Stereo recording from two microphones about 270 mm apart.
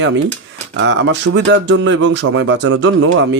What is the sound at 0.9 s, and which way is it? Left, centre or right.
Speech, right.